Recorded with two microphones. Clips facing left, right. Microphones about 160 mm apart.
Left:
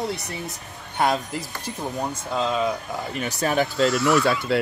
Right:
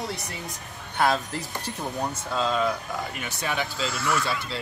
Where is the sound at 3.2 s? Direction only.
40° left (ahead or behind).